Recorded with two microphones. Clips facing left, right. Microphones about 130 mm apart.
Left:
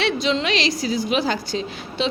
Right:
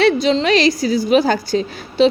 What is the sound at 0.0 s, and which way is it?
A woman's voice, 40° right (ahead or behind).